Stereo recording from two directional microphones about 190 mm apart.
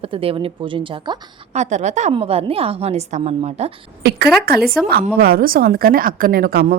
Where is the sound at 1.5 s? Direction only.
35° right (ahead or behind).